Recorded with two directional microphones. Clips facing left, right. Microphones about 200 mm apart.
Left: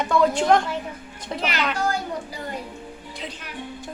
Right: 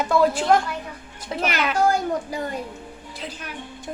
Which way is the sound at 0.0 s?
5° right (ahead or behind).